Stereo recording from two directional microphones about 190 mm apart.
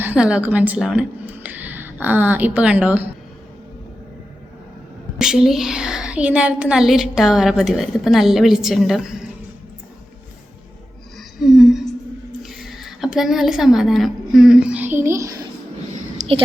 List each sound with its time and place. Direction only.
0.0 s speech: 5° right (ahead or behind)
5.1 s a woman's voice: 5° right (ahead or behind)
11.4 s a woman's voice: centre (ahead or behind)
16.1 s a sound: 30° right (ahead or behind)